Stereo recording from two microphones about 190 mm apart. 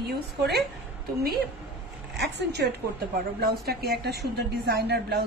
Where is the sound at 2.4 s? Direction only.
60° right (ahead or behind).